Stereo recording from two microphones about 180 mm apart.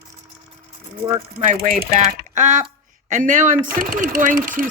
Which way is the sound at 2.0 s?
40° right (ahead or behind).